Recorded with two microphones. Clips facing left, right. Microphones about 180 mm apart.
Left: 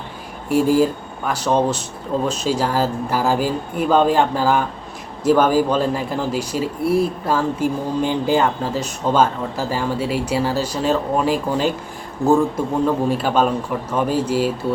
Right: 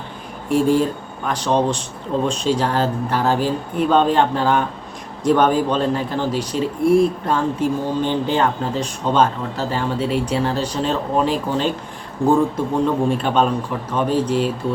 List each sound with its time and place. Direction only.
0.4 s speech: 5° left (ahead or behind)
13.1 s speech: 5° left (ahead or behind)